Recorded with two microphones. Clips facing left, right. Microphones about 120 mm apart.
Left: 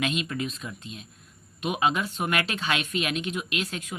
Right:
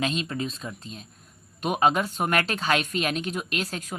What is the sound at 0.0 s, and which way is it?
Speech, 35° right (ahead or behind).